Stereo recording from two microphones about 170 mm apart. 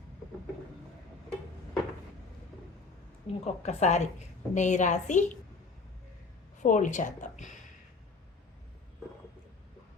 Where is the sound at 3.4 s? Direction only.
40° left (ahead or behind).